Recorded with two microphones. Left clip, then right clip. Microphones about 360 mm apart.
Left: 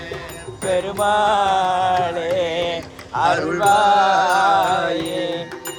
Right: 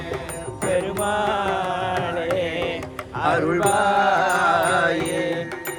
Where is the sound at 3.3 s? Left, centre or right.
Centre.